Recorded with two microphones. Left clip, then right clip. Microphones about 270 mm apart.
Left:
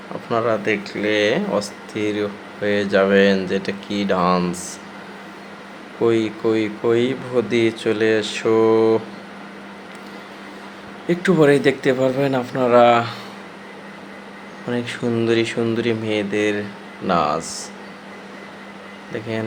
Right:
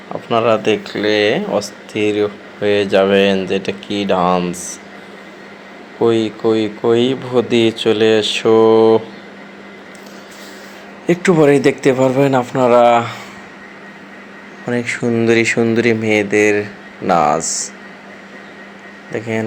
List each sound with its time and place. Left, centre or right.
0.3 s speech: centre
6.0 s speech: centre
11.0 s speech: centre
14.7 s speech: centre